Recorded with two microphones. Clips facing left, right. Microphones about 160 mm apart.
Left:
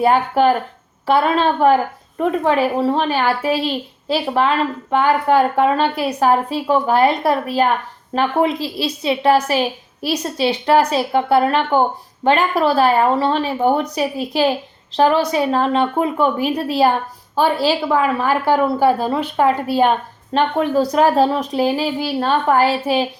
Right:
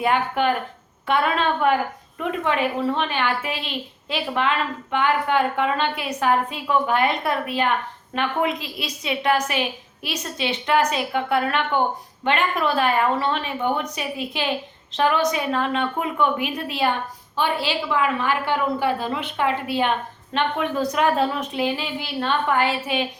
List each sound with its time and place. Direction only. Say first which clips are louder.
0.0 s a woman's voice: left 7 dB; 35° left (ahead or behind)